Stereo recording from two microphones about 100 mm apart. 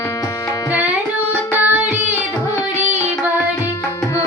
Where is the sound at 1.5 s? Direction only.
20° right (ahead or behind).